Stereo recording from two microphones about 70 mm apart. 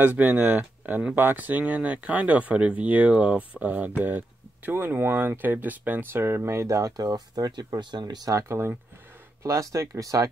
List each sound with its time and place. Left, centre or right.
0.0 s speech: right
6.2 s speech: right
8.3 s speech: right
9.4 s speech: right